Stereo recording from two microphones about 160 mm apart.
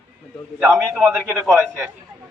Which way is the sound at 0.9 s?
10° right (ahead or behind).